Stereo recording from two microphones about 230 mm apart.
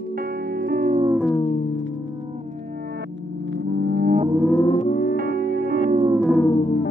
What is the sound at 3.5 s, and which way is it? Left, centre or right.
Music, right.